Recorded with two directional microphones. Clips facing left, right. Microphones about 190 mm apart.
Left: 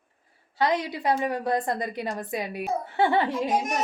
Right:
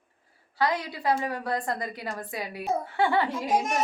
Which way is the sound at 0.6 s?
20° left (ahead or behind).